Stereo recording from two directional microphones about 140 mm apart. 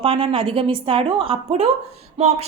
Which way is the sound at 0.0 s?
40° right (ahead or behind).